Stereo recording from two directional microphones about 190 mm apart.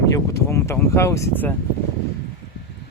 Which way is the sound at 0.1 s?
15° left (ahead or behind).